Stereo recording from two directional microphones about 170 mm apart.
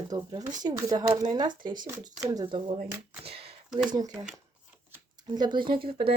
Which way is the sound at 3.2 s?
35° right (ahead or behind).